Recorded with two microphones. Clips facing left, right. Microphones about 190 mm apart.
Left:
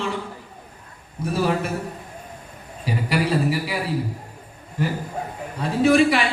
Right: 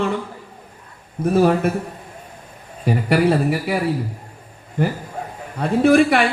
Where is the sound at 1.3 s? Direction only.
55° right (ahead or behind).